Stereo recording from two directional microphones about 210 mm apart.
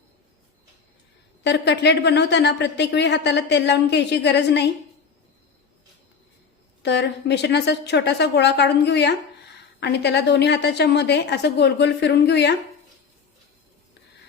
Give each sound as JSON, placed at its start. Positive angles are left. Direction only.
{"t": 1.5, "sound": "a woman's voice", "side_deg": 55}
{"t": 6.8, "sound": "a woman's voice", "side_deg": 55}